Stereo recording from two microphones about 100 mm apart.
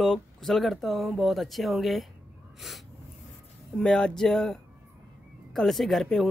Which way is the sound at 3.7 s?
10° left (ahead or behind).